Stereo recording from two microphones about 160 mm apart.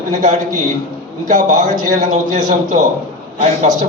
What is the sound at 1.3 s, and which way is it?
Speech, 50° right (ahead or behind).